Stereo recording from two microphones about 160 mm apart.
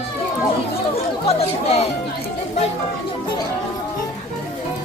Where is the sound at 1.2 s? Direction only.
40° left (ahead or behind).